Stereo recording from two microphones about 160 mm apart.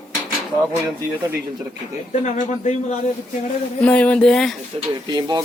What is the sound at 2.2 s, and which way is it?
Speech, 50° left (ahead or behind).